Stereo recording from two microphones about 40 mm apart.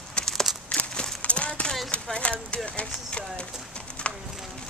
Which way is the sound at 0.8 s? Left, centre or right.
Left.